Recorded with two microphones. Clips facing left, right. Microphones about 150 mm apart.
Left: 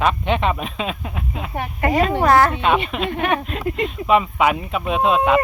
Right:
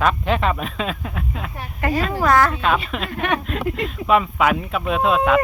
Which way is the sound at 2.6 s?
Centre (ahead or behind).